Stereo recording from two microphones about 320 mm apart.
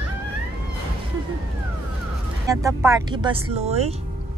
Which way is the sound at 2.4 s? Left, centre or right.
Centre.